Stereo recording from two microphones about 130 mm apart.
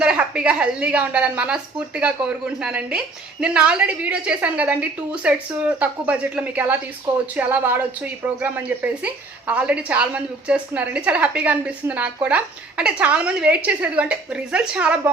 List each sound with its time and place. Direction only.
0.0 s a woman's voice: 10° right (ahead or behind)